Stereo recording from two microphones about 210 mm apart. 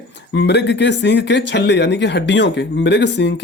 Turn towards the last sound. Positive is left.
turn(degrees=55)  # may be behind; listen again after turning